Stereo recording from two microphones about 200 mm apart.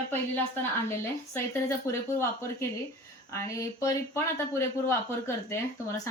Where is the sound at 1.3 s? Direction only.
15° left (ahead or behind).